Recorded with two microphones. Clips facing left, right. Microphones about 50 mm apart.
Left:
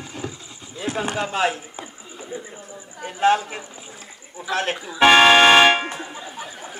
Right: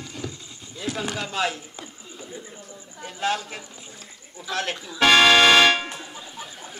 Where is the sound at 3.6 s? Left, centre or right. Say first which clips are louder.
Left 4 dB; centre.